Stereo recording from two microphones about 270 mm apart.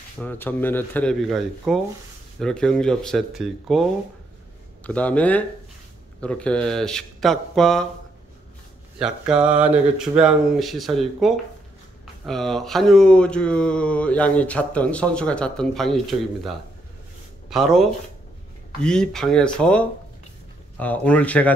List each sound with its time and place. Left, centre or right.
0.2 s speech: centre
4.8 s speech: centre
9.0 s speech: centre